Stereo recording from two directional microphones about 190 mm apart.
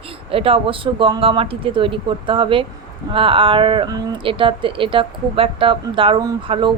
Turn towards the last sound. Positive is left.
turn(degrees=-25)  # may be behind; listen again after turning